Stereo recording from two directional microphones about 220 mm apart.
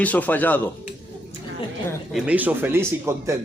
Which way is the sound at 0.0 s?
5° left (ahead or behind).